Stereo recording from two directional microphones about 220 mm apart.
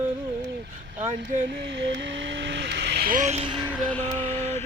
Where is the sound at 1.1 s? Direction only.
35° right (ahead or behind).